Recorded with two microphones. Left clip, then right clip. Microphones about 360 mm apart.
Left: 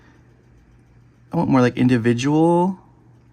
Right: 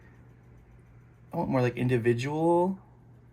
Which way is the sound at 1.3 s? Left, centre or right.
Left.